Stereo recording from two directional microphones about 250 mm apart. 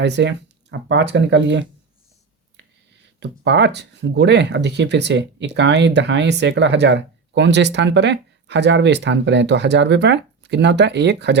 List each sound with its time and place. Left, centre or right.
0.0 s speech: right
3.2 s speech: right